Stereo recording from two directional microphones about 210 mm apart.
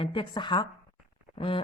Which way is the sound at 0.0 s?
25° left (ahead or behind).